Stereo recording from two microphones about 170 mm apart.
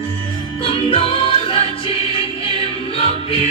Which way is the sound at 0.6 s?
35° left (ahead or behind).